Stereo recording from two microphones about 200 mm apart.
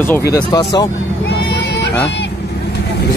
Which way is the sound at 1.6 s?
55° left (ahead or behind).